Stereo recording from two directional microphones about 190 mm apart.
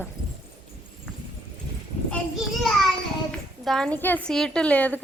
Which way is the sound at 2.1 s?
Centre (ahead or behind).